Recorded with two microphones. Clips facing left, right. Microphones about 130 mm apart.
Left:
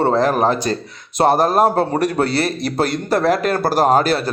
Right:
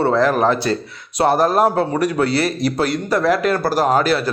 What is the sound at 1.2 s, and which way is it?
Speech, 25° left (ahead or behind).